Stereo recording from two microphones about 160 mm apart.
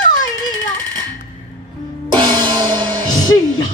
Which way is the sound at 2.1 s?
30° right (ahead or behind).